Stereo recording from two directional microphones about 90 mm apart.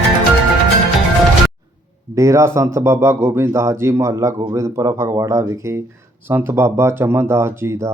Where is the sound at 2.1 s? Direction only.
35° right (ahead or behind).